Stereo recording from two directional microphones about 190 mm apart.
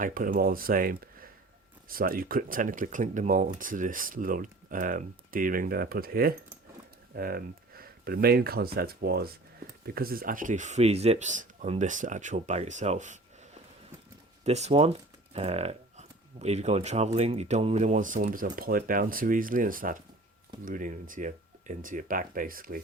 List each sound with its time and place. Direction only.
0.0 s speech: 45° right (ahead or behind)
14.4 s speech: 35° right (ahead or behind)